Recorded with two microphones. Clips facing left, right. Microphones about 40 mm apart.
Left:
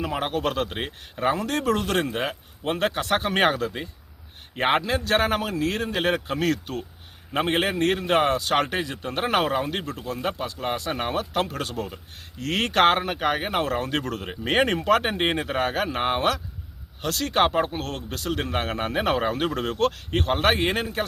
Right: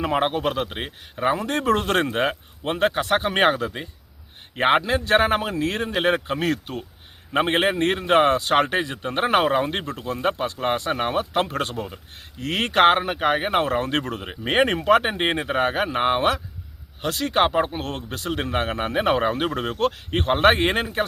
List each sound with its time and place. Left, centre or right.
0.0 s speech: right; by 1.5 s centre
1.5 s speech: right
2.7 s a man's voice: centre
9.6 s speech: right
10.9 s a man's voice: right
12.4 s speech: centre
14.3 s speech: centre
17.8 s a man's voice: right
18.4 s a man's voice: centre